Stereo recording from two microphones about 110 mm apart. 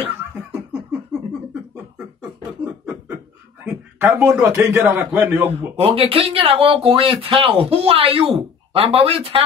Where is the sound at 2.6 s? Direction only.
15° right (ahead or behind).